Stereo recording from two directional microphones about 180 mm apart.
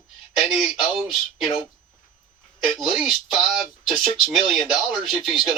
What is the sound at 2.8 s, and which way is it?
Speech, 5° right (ahead or behind).